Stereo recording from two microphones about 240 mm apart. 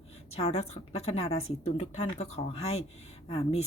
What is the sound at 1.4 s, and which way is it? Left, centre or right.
Speech, left.